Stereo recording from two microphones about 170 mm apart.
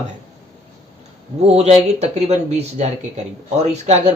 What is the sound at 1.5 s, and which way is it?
Speech, 40° right (ahead or behind).